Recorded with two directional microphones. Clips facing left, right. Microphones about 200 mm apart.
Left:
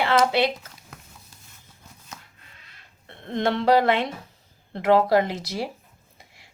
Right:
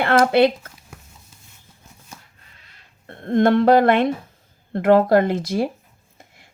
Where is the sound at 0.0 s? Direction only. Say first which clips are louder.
Right 5 dB; 55° right (ahead or behind).